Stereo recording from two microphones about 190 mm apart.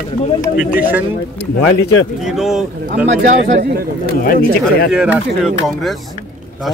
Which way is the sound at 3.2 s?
40° right (ahead or behind).